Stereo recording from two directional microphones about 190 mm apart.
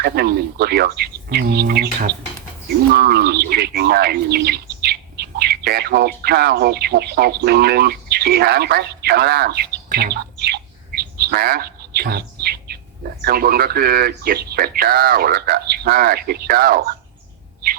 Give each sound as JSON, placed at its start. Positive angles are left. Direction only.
{"t": 0.0, "sound": "speech", "side_deg": -55}
{"t": 2.9, "sound": "bird", "side_deg": -55}